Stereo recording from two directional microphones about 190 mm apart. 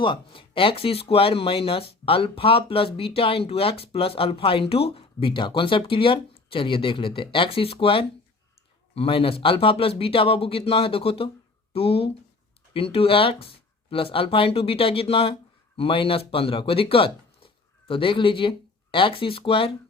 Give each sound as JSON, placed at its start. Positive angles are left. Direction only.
{"t": 0.0, "sound": "speech", "side_deg": 25}